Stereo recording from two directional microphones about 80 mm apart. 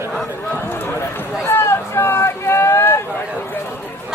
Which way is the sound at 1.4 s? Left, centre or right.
Left.